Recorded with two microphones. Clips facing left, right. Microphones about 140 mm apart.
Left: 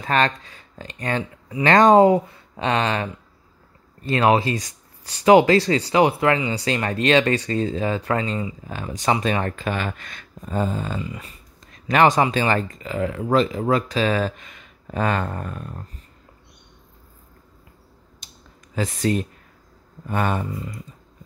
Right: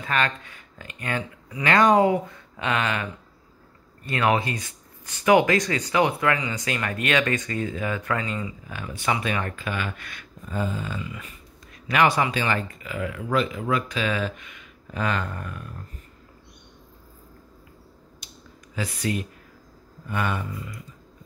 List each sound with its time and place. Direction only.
0.0 s speech: 40° left (ahead or behind)
4.1 s speech: 25° left (ahead or behind)
18.8 s speech: 45° left (ahead or behind)